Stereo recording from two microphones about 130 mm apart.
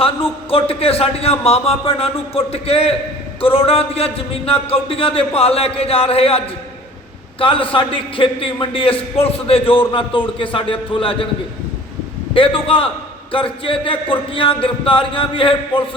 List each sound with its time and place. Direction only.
0.0 s a man's voice: 45° left (ahead or behind)
12.3 s a man's voice: 45° left (ahead or behind)